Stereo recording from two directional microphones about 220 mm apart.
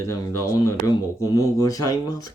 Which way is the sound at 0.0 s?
15° left (ahead or behind).